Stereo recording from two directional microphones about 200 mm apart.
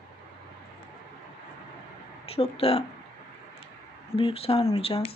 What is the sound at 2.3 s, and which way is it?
Speech, 30° left (ahead or behind).